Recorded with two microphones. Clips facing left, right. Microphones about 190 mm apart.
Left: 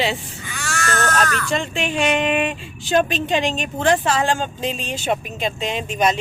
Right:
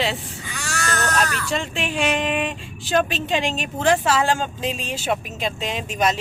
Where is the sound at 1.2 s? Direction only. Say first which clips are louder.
Left 3 dB; 5° right (ahead or behind).